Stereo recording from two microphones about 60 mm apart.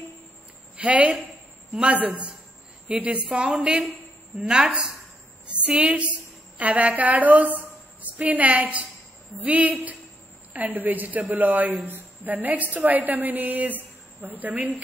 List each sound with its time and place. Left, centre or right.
0.7 s a woman's voice: right; by 4.9 s centre
5.5 s a woman's voice: centre